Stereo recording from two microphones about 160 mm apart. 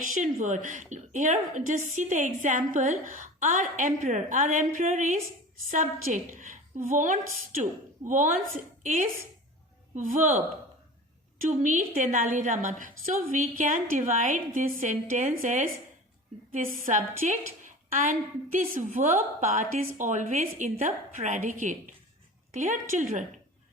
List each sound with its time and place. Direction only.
0.1 s a woman's voice: 55° right (ahead or behind)
11.4 s a woman's voice: 50° right (ahead or behind)